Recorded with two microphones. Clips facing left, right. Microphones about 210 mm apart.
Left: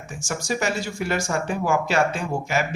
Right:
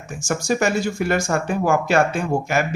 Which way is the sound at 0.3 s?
50° right (ahead or behind).